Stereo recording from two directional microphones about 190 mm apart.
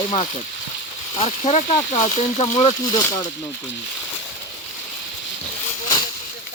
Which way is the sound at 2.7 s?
20° left (ahead or behind).